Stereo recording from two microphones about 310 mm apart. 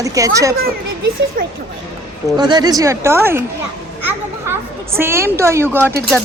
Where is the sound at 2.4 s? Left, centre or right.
Centre.